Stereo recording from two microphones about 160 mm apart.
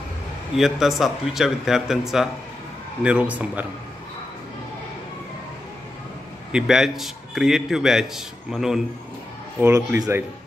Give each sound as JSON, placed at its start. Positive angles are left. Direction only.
{"t": 0.6, "sound": "a man's voice", "side_deg": 0}
{"t": 6.5, "sound": "a man's voice", "side_deg": -5}
{"t": 9.6, "sound": "speech", "side_deg": -20}